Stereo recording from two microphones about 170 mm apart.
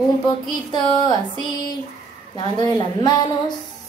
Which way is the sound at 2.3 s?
25° left (ahead or behind).